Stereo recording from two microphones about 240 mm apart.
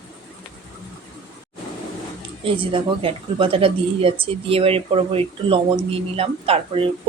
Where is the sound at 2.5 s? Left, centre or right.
Right.